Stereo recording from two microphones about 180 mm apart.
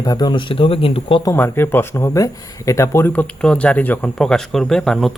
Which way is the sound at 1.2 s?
15° left (ahead or behind).